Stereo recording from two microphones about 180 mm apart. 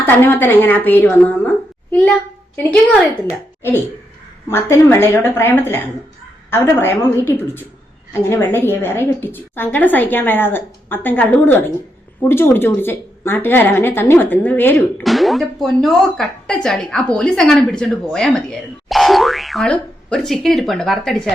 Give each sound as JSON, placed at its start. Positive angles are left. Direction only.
{"t": 0.0, "sound": "a woman's voice", "side_deg": 10}
{"t": 8.1, "sound": "a woman's voice", "side_deg": 15}
{"t": 15.0, "sound": "speech", "side_deg": 0}